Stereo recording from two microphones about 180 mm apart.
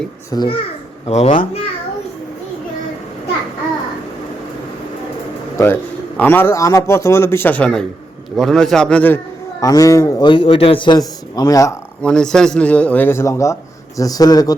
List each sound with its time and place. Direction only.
0.3 s a child's voice: 20° left (ahead or behind)
1.0 s a child's voice: 35° left (ahead or behind)
5.5 s a man's voice: 10° left (ahead or behind)
12.0 s a man's voice: 5° left (ahead or behind); by 14.5 s 20° left (ahead or behind)